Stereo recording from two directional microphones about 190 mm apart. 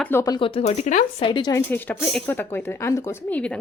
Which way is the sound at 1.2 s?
25° left (ahead or behind).